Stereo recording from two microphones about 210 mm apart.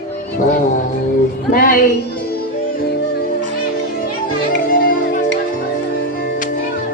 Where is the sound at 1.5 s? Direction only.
45° left (ahead or behind).